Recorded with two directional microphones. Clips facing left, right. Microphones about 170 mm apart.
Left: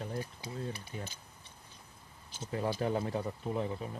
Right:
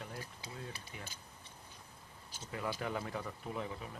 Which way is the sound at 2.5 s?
30° left (ahead or behind).